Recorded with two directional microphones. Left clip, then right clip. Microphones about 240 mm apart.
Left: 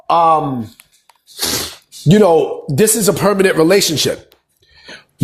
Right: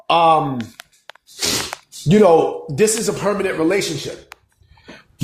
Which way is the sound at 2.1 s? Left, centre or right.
Left.